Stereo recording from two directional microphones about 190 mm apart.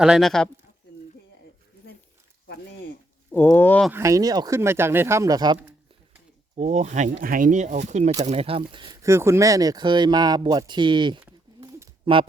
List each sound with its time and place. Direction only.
0.0 s speech: centre (ahead or behind)
3.3 s speech: 10° left (ahead or behind)
3.9 s speech: 15° right (ahead or behind)
6.6 s speech: 35° right (ahead or behind)
9.0 s speech: 15° right (ahead or behind)
11.3 s bird: 15° right (ahead or behind)